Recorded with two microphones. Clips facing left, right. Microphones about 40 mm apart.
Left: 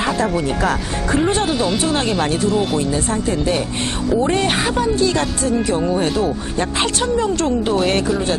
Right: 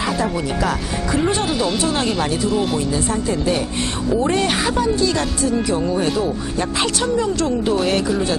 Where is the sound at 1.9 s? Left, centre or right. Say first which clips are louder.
Left 1 dB; left.